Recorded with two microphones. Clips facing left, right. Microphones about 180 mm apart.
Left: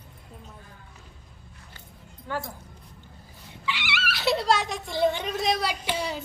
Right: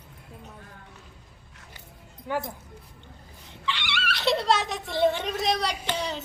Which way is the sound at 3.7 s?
5° left (ahead or behind).